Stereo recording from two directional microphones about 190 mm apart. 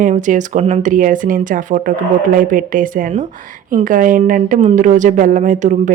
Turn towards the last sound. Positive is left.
turn(degrees=-40)  # may be behind; listen again after turning